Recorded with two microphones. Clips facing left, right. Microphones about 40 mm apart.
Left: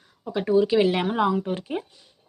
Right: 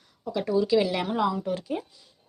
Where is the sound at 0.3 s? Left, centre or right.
Left.